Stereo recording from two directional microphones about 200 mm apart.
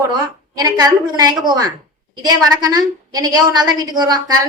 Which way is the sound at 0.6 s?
20° right (ahead or behind).